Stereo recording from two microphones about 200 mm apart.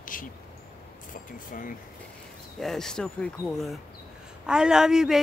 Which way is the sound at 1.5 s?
45° left (ahead or behind).